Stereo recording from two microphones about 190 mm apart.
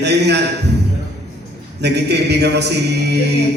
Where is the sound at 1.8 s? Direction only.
60° right (ahead or behind).